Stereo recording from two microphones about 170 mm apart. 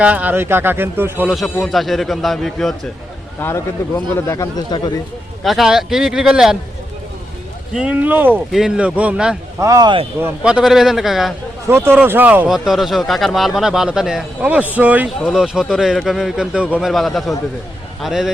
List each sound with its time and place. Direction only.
0.0 s speech: 10° right (ahead or behind)
1.5 s speech: centre (ahead or behind)
3.4 s a man's voice: 15° left (ahead or behind)
5.4 s speech: centre (ahead or behind)
7.7 s speech: 5° right (ahead or behind)
9.6 s speech: 20° right (ahead or behind)
10.2 s speech: 10° right (ahead or behind)
11.7 s speech: 15° right (ahead or behind)